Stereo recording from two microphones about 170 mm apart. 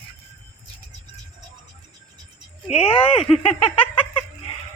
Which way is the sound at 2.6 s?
35° left (ahead or behind).